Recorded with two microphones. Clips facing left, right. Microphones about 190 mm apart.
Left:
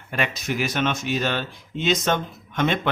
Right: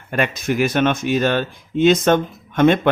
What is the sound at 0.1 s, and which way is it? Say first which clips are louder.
Speech: right 6 dB; 50° right (ahead or behind).